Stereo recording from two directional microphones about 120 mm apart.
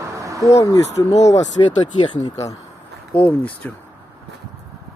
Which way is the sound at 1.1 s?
65° left (ahead or behind).